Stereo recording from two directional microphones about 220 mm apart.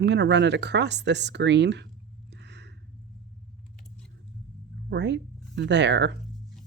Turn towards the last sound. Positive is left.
turn(degrees=-50)  # may be behind; listen again after turning